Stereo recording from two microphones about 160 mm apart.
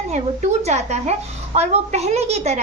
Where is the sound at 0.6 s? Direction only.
45° right (ahead or behind).